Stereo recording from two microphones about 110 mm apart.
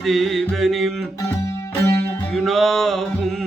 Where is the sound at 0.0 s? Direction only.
Centre (ahead or behind).